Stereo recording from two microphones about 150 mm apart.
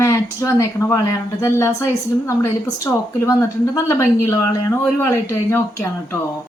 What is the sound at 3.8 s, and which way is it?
Speech, 20° left (ahead or behind).